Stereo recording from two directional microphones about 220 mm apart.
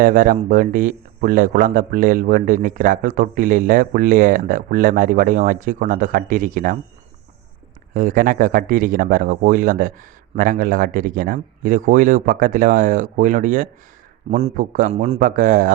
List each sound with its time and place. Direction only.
0.0 s speech: 40° right (ahead or behind)
7.9 s speech: 40° right (ahead or behind)